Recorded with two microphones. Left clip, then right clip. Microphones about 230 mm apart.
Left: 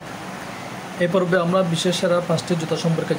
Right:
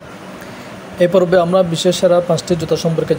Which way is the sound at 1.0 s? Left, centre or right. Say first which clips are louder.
Right 8 dB; centre.